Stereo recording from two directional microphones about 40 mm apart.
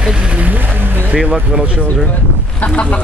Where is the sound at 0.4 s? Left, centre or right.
Right.